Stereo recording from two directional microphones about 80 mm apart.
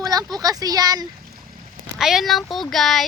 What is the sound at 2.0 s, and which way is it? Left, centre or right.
Speech, centre.